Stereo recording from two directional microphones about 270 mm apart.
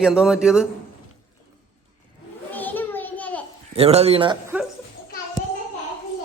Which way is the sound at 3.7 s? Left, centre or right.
Right.